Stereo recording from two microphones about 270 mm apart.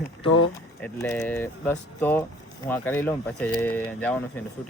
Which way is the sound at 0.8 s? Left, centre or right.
Centre.